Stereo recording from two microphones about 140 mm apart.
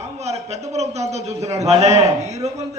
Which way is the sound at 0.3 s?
50° right (ahead or behind).